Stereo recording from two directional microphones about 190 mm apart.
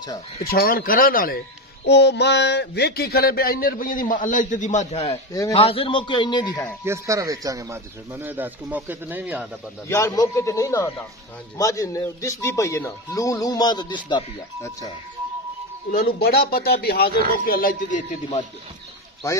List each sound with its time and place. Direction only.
0.4 s speech: 55° left (ahead or behind)
1.9 s speech: 65° left (ahead or behind); by 5.1 s 35° left (ahead or behind)
5.1 s speech: 15° left (ahead or behind)
5.5 s a man's voice: 30° left (ahead or behind)
6.8 s speech: 15° right (ahead or behind)
9.8 s speech: 15° left (ahead or behind)
15.9 s a man's voice: 55° left (ahead or behind)